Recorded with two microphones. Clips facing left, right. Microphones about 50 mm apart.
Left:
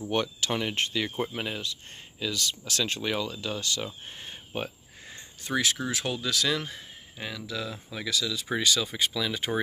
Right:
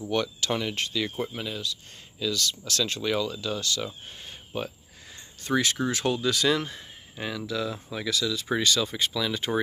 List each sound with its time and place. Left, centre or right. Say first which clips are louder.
0.1 s speech: right 1 dB; left
1.0 s speech: even; centre
1.3 s speech: even; left
4.6 s a sound: right 1 dB; centre
5.5 s speech: right 3 dB; centre